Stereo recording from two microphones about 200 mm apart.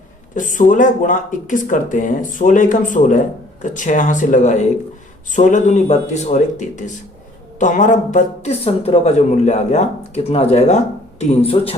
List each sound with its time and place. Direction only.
0.3 s speech: 40° left (ahead or behind)